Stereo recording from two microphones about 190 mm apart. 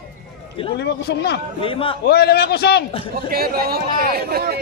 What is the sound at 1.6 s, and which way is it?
Speech, 30° left (ahead or behind).